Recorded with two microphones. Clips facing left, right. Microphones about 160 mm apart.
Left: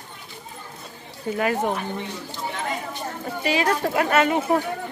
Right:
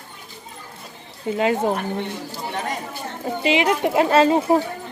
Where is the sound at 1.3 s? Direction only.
25° right (ahead or behind).